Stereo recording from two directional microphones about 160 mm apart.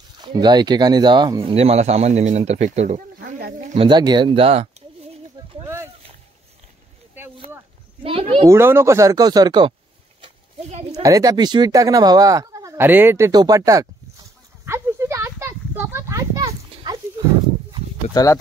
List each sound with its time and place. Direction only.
0.2 s speech: 25° right (ahead or behind); by 3.0 s 45° right (ahead or behind)
3.3 s a sound: 80° right
3.6 s speech: 35° right (ahead or behind)
8.0 s speech: 35° right (ahead or behind)
8.5 s speech: 15° right (ahead or behind)
10.7 s speech: 45° right (ahead or behind)
11.0 s speech: 20° right (ahead or behind)
14.7 s a sound: 15° right (ahead or behind)
18.1 s speech: 20° left (ahead or behind)